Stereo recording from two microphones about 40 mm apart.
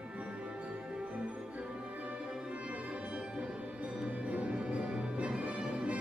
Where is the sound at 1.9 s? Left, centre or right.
Right.